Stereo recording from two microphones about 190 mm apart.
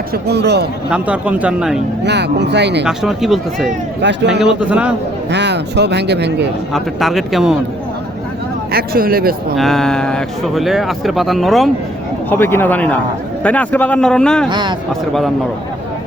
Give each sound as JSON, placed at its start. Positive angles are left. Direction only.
{"t": 0.1, "sound": "speech", "side_deg": -60}
{"t": 0.9, "sound": "speech", "side_deg": -5}
{"t": 2.0, "sound": "speech", "side_deg": -65}
{"t": 2.8, "sound": "speech", "side_deg": 0}
{"t": 5.3, "sound": "speech", "side_deg": -65}
{"t": 6.7, "sound": "speech", "side_deg": 0}
{"t": 8.7, "sound": "speech", "side_deg": -50}
{"t": 9.6, "sound": "speech", "side_deg": 0}
{"t": 12.3, "sound": "a man's voice", "side_deg": 10}
{"t": 14.5, "sound": "a man's voice", "side_deg": -25}